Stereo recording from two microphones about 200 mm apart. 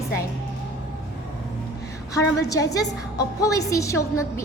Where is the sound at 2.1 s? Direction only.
15° left (ahead or behind).